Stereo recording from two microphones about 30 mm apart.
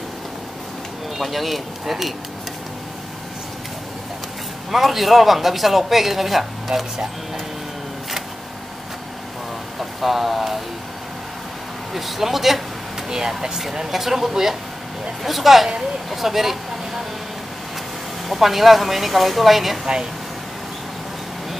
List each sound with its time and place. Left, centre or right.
1.1 s speech: centre
4.6 s speech: centre
9.8 s speech: centre
11.9 s speech: centre
13.1 s speech: right
13.8 s speech: centre
16.1 s vehicle: centre
18.3 s speech: centre